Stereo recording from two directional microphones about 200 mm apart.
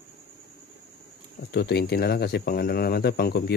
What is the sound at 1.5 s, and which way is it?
Speech, 55° left (ahead or behind).